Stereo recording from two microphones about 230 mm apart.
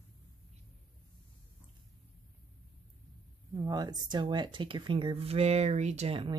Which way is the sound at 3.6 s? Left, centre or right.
Centre.